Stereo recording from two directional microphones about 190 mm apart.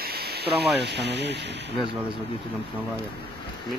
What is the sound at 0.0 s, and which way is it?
Speech, 55° right (ahead or behind).